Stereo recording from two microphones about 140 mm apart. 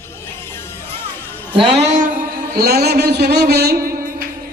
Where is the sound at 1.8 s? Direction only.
65° right (ahead or behind).